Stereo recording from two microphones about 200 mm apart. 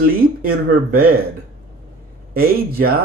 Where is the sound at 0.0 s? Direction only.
45° right (ahead or behind).